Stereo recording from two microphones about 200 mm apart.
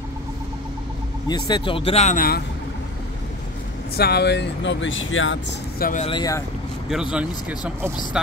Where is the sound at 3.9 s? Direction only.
55° left (ahead or behind); by 5.4 s 75° left (ahead or behind).